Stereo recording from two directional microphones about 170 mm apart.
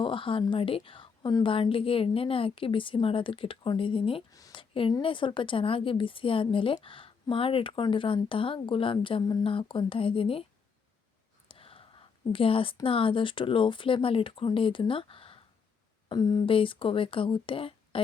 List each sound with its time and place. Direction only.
0.0 s a woman's voice: 30° left (ahead or behind)
4.3 s speech: 20° left (ahead or behind)
4.7 s a woman's voice: 30° left (ahead or behind)
11.4 s a woman's voice: 30° left (ahead or behind)